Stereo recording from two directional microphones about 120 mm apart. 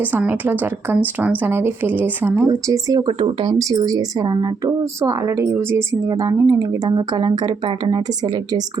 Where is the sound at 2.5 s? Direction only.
30° right (ahead or behind).